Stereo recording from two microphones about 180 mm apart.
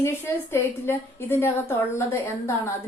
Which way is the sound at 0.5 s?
10° left (ahead or behind).